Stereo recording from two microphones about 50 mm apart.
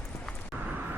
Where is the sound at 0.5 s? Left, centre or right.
Right.